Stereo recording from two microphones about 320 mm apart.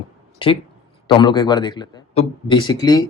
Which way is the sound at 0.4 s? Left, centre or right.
Centre.